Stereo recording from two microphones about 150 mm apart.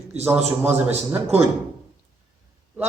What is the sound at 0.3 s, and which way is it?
Speech, 15° right (ahead or behind).